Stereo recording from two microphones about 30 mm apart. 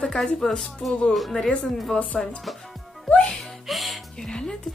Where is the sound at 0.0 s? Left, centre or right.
Centre.